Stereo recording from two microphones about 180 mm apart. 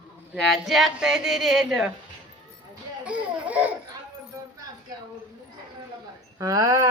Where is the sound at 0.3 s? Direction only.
Centre (ahead or behind).